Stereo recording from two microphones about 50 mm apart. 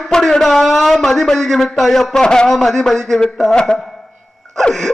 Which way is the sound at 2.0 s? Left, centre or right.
Centre.